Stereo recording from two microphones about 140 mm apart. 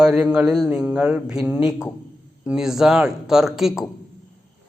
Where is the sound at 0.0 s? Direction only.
5° right (ahead or behind).